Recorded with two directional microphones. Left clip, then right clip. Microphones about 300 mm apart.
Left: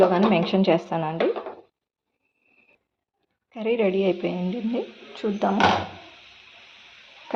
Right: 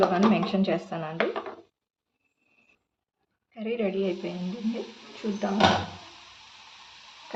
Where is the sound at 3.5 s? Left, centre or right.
Centre.